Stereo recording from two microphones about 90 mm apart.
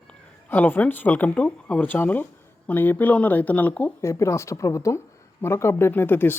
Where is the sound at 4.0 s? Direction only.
30° left (ahead or behind).